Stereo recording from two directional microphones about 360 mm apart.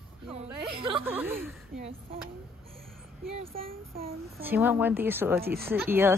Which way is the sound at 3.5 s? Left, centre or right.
Right.